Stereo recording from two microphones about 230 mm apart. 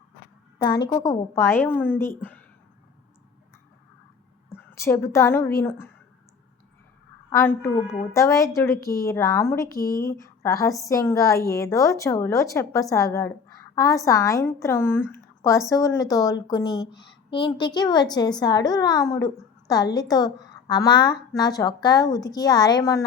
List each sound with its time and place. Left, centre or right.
0.6 s a woman's voice: centre
4.5 s a woman's voice: centre
7.3 s a woman's voice: centre